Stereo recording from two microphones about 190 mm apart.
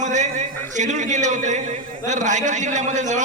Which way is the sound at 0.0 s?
40° right (ahead or behind).